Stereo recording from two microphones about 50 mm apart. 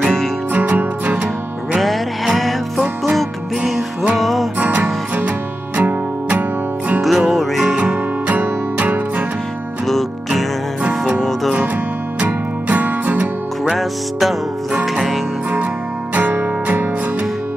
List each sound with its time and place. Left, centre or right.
0.0 s music: centre
0.5 s music: right
1.8 s music: centre
4.6 s music: right
7.0 s music: centre
8.3 s music: right
9.8 s music: centre
12.2 s music: right
13.7 s music: centre
16.2 s music: right